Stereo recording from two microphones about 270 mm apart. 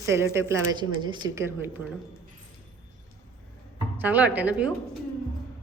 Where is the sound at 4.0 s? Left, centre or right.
Centre.